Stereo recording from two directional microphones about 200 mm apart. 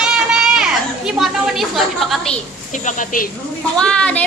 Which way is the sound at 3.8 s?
5° left (ahead or behind).